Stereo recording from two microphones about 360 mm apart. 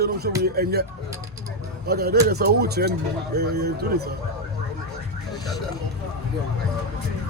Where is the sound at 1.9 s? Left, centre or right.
Right.